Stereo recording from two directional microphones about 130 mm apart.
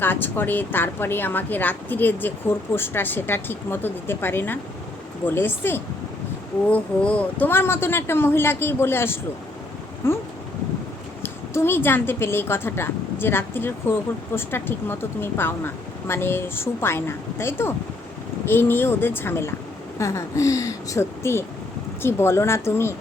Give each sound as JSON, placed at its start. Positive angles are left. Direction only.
{"t": 0.0, "sound": "a woman's voice", "side_deg": 15}